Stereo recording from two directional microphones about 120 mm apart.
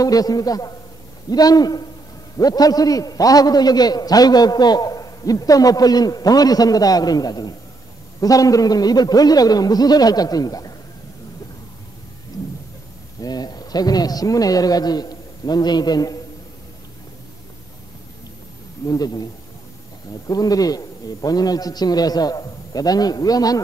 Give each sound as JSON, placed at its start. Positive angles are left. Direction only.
{"t": 0.0, "sound": "a man's voice", "side_deg": 30}
{"t": 13.2, "sound": "a man's voice", "side_deg": 35}
{"t": 18.9, "sound": "a man's voice", "side_deg": 35}
{"t": 20.2, "sound": "a man's voice", "side_deg": 30}